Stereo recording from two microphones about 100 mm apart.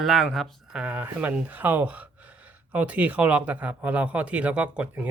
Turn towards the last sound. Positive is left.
turn(degrees=-10)  # may be behind; listen again after turning